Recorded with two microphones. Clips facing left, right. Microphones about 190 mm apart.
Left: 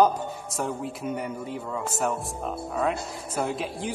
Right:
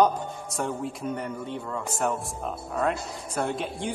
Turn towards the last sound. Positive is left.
turn(degrees=0)  # may be behind; listen again after turning